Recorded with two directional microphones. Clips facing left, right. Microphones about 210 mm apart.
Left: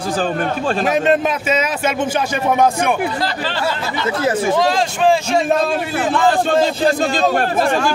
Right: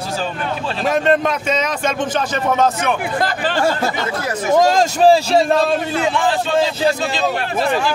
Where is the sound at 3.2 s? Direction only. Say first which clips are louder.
Right 3 dB; 45° right (ahead or behind).